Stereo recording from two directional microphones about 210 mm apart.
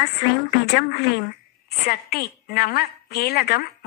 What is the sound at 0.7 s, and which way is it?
A woman's voice, 45° left (ahead or behind).